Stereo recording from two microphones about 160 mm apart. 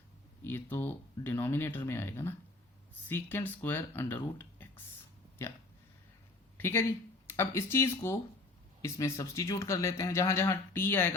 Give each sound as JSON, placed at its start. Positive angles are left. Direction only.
{"t": 0.5, "sound": "speech", "side_deg": 10}
{"t": 6.6, "sound": "speech", "side_deg": 15}